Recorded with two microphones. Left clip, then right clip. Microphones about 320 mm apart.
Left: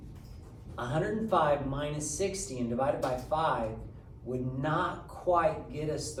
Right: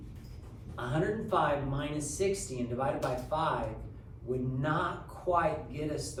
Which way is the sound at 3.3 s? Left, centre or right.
Left.